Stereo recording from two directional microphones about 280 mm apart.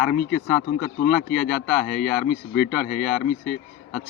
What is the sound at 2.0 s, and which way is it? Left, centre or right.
Speech, left.